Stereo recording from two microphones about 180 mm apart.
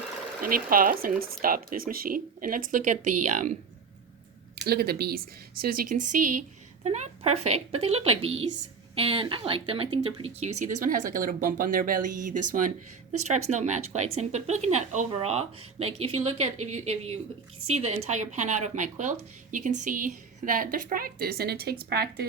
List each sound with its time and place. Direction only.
0.4 s speech: 50° right (ahead or behind)
4.6 s speech: 60° right (ahead or behind)